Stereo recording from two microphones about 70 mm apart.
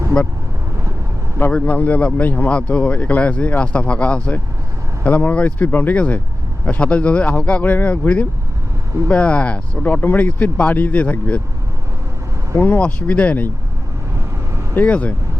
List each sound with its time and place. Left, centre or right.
0.1 s speech: centre
1.5 s speech: centre
12.5 s speech: left
12.8 s speech: centre
14.8 s speech: centre